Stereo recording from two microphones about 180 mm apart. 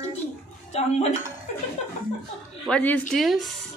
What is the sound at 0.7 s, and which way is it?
Speech, 35° left (ahead or behind).